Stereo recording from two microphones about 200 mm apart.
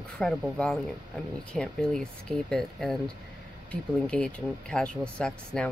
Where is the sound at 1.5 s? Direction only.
5° left (ahead or behind).